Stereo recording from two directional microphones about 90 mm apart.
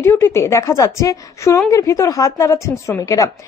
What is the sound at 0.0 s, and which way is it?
A woman's voice, 25° left (ahead or behind).